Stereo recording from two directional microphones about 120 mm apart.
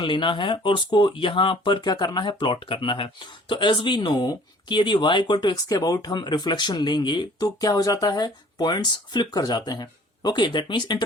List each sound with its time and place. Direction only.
0.0 s speech: 45° left (ahead or behind)